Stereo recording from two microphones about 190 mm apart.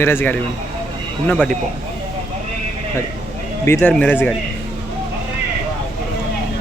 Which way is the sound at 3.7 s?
10° left (ahead or behind).